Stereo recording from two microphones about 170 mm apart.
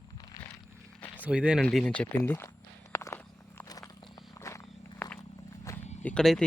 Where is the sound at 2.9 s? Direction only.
15° left (ahead or behind).